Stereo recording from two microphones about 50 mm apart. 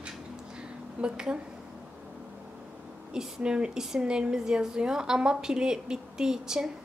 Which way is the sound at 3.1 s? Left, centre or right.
Centre.